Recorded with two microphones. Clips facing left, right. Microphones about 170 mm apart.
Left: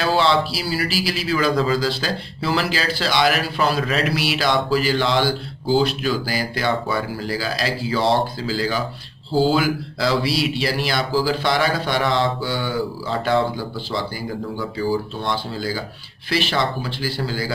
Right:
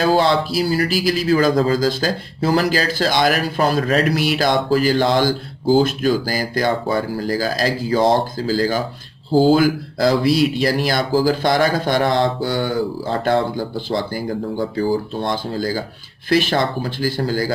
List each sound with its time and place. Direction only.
0.0 s speech: 45° right (ahead or behind)